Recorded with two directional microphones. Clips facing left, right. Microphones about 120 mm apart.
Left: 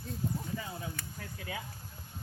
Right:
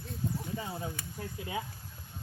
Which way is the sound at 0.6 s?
25° right (ahead or behind).